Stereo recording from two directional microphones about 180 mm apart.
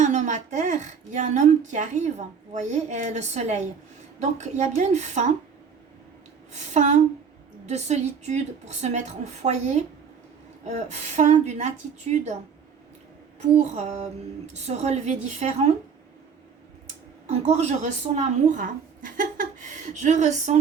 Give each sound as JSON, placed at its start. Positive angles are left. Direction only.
{"t": 0.0, "sound": "a woman's voice", "side_deg": -40}
{"t": 6.5, "sound": "a woman's voice", "side_deg": -40}
{"t": 10.7, "sound": "a woman's voice", "side_deg": -40}
{"t": 13.6, "sound": "a woman's voice", "side_deg": -40}
{"t": 17.2, "sound": "a woman's voice", "side_deg": -40}